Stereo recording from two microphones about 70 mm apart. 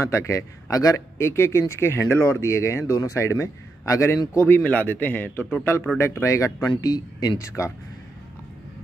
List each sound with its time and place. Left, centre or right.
0.0 s speech: left
1.1 s speech: left
4.3 s speech: left
4.6 s a man's voice: left
7.3 s speech: left